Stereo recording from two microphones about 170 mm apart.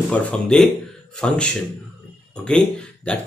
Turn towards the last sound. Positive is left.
turn(degrees=5)  # may be behind; listen again after turning